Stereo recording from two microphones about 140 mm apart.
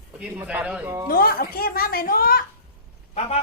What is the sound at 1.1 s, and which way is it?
Speech, 90° left.